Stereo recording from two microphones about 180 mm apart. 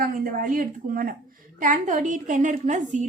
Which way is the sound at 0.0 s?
50° right (ahead or behind).